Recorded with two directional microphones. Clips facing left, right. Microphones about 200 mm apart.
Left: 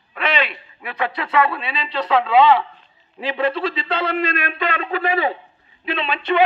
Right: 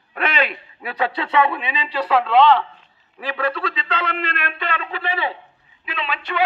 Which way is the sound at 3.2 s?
25° left (ahead or behind).